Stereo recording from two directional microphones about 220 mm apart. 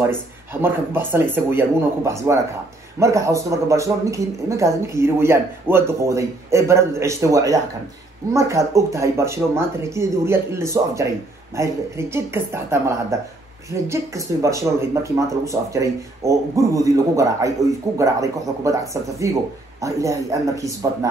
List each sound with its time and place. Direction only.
0.0 s speech: 10° right (ahead or behind)